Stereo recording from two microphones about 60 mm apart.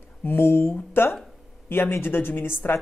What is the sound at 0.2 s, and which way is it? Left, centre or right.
Speech, left.